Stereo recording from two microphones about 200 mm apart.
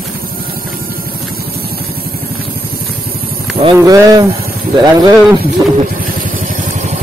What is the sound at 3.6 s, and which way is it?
Speech, 20° right (ahead or behind).